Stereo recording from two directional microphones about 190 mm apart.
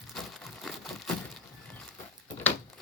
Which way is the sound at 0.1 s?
Centre (ahead or behind).